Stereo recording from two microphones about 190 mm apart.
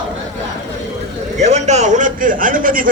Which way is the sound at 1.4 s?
35° right (ahead or behind).